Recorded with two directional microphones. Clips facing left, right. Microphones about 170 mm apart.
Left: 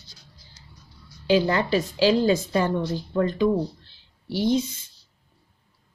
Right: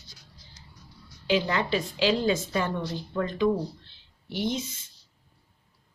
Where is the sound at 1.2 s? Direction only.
35° left (ahead or behind).